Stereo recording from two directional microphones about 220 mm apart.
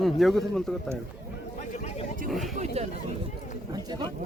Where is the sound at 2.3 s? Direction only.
Centre (ahead or behind).